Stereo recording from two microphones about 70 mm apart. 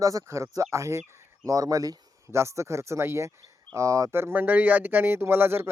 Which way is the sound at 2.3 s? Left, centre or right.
Right.